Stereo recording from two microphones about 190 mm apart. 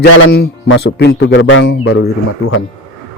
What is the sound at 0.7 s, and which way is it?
A man's voice, 75° left (ahead or behind).